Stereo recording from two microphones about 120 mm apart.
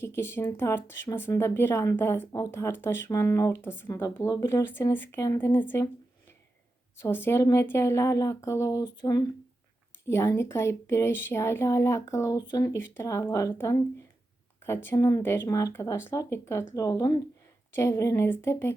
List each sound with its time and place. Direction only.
0.0 s speech: 20° left (ahead or behind)
7.0 s speech: 20° left (ahead or behind)
12.4 s speech: 35° left (ahead or behind)
14.9 s speech: 30° left (ahead or behind)